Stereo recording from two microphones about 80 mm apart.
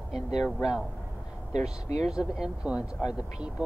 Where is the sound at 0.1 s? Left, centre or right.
Centre.